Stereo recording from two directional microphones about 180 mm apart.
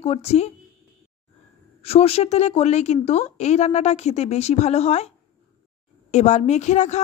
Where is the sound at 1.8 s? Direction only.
35° left (ahead or behind).